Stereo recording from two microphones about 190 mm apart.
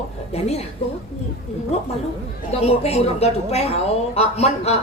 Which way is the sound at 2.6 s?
35° left (ahead or behind).